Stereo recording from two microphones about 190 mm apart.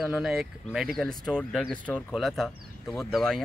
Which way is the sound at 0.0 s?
5° right (ahead or behind).